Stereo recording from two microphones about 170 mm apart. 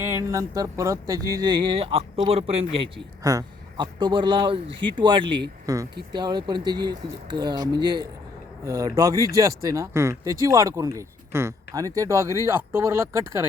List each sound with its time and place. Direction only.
0.0 s speech: 15° right (ahead or behind); by 2.9 s 35° right (ahead or behind)
3.2 s speech: 25° right (ahead or behind)